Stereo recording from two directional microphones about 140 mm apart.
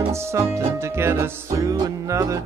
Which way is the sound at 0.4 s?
20° right (ahead or behind).